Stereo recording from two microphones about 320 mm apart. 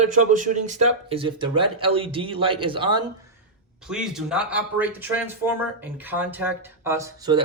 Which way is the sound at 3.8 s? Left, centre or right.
Centre.